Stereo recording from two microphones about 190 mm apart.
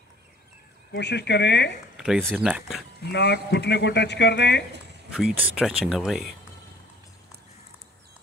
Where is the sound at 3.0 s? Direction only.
60° left (ahead or behind).